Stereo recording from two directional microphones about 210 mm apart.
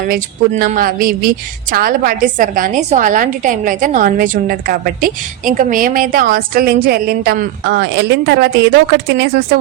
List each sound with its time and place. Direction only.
0.0 s a woman's voice: 45° right (ahead or behind)